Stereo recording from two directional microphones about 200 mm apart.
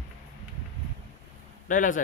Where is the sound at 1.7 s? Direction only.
40° left (ahead or behind).